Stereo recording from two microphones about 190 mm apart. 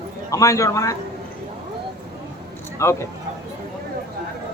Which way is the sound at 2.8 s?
15° left (ahead or behind).